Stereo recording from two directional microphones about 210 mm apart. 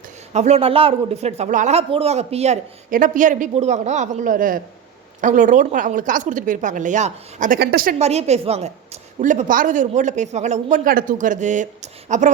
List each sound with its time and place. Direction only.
0.3 s a woman's voice: 30° right (ahead or behind); by 7.9 s 45° right (ahead or behind)
7.9 s a woman's voice: 30° right (ahead or behind)